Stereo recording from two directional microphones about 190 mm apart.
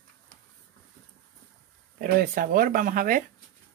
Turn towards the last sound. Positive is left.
turn(degrees=-45)  # may be behind; listen again after turning